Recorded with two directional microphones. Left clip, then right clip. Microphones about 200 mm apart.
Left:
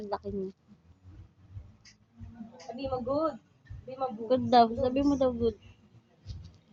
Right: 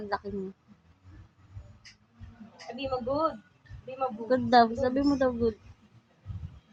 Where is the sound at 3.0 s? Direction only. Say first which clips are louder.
Right 1 dB; 20° right (ahead or behind).